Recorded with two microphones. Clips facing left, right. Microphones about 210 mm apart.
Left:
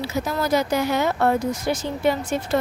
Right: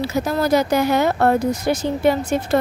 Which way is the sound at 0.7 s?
60° right (ahead or behind).